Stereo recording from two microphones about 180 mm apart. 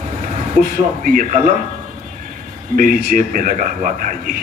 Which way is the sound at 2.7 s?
55° right (ahead or behind).